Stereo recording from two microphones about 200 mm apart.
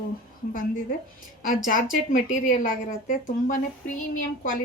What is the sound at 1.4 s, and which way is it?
A woman's voice, 40° left (ahead or behind).